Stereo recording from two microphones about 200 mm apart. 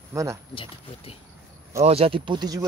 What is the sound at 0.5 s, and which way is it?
Speech, 25° left (ahead or behind).